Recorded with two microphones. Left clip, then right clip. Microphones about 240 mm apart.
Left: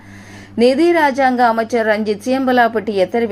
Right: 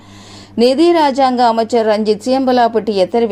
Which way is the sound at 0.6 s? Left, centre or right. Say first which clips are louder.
Right 2 dB; centre.